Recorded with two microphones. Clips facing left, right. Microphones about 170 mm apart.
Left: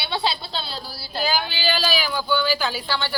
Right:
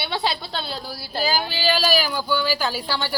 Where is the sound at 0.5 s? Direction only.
50° right (ahead or behind).